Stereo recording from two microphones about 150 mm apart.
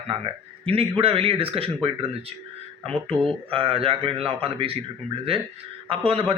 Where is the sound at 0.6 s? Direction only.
40° right (ahead or behind).